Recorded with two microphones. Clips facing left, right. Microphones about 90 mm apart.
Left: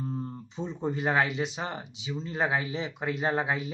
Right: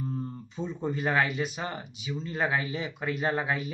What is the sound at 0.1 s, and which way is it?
Speech, 20° left (ahead or behind).